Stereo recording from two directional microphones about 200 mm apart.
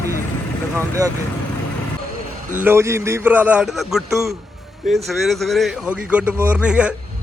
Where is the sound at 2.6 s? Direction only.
10° right (ahead or behind).